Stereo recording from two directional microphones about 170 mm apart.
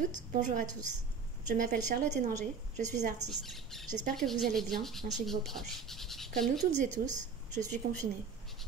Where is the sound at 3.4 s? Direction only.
Centre (ahead or behind).